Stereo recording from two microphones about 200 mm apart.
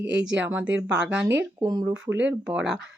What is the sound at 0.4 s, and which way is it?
Speech, 10° right (ahead or behind).